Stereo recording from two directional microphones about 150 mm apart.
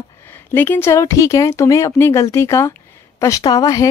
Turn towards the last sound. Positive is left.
turn(degrees=25)  # may be behind; listen again after turning